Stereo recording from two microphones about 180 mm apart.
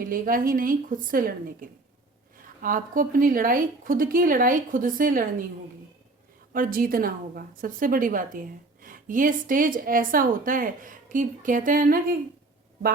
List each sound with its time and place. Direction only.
0.0 s a woman's voice: 50° right (ahead or behind)
6.5 s a woman's voice: 50° right (ahead or behind)